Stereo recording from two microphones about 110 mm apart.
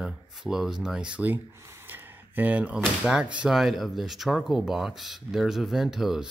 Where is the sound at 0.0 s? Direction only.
5° right (ahead or behind).